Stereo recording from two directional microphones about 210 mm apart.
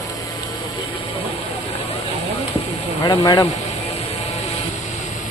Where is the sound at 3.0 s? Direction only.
20° left (ahead or behind).